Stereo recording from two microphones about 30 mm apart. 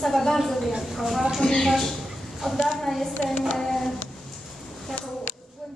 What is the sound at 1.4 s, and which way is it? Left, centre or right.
Speech, left.